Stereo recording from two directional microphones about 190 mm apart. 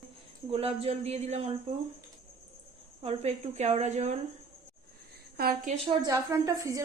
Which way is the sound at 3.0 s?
30° right (ahead or behind).